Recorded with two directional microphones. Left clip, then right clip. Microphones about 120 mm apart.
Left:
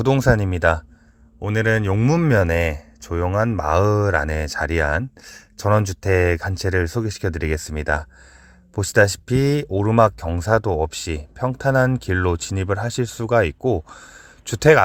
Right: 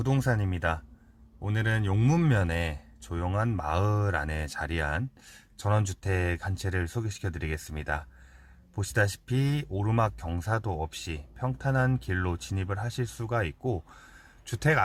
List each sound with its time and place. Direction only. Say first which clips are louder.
0.0 s speech: left 12 dB; 55° left (ahead or behind)